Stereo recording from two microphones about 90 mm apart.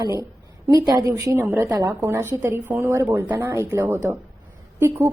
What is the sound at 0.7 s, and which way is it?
Speech, 45° right (ahead or behind).